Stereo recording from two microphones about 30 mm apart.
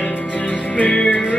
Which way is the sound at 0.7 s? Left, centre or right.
Left.